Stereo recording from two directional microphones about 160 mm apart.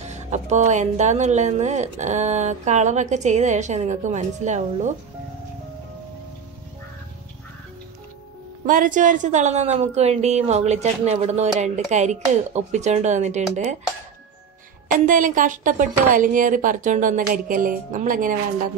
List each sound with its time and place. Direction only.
0.0 s a woman's voice: 45° right (ahead or behind)
8.6 s a woman's voice: 55° right (ahead or behind)
14.9 s a woman's voice: 55° right (ahead or behind)